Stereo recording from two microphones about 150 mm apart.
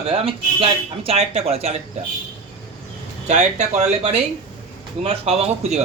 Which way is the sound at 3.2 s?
50° right (ahead or behind).